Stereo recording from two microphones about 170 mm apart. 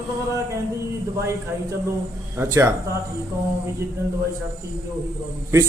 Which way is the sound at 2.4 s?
15° right (ahead or behind).